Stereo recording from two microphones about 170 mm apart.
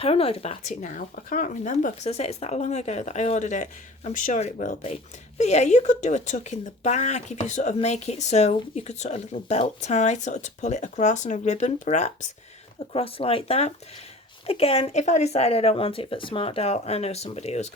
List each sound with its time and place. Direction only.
0.0 s speech: 35° left (ahead or behind)
12.9 s speech: 35° left (ahead or behind)